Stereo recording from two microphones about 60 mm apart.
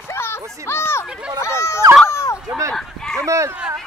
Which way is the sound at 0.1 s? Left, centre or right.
Left.